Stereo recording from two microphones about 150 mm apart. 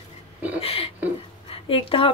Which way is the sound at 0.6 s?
40° left (ahead or behind).